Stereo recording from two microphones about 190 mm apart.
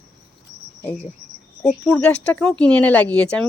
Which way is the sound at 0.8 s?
10° left (ahead or behind).